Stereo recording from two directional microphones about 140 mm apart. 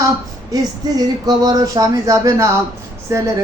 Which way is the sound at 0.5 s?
30° right (ahead or behind).